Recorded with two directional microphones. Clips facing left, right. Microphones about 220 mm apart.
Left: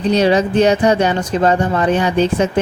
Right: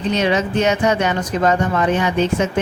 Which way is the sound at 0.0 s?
35° left (ahead or behind).